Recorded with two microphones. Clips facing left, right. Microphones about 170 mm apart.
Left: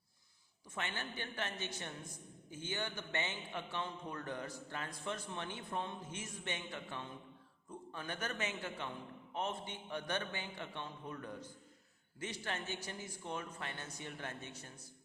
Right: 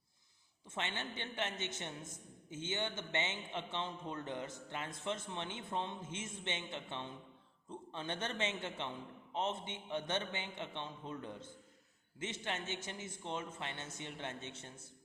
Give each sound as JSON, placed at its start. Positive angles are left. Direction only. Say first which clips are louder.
{"t": 0.7, "sound": "a woman's voice", "louder": "right 1 dB", "side_deg": -20}